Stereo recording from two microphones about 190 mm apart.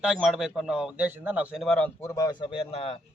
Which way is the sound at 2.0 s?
15° left (ahead or behind).